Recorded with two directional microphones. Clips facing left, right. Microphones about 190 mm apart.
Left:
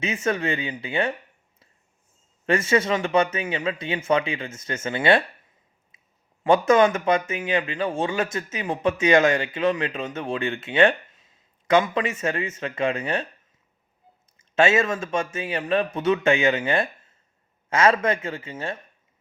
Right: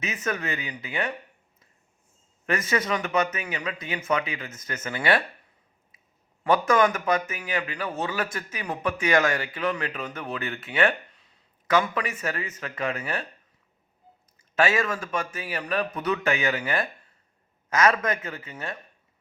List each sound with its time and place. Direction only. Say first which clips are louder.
0.0 s speech: left 5 dB; 30° left (ahead or behind)
2.5 s speech: left 5 dB; 30° left (ahead or behind)
6.4 s speech: left 4 dB; 25° left (ahead or behind)
14.3 s speech: left 4 dB; 25° left (ahead or behind)